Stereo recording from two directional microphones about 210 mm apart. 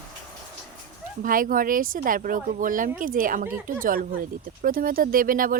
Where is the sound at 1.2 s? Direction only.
40° right (ahead or behind).